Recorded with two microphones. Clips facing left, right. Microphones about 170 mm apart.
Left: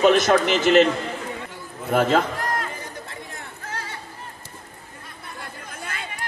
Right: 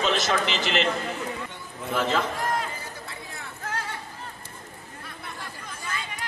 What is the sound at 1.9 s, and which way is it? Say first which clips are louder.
Speech: left 6 dB; 55° left (ahead or behind).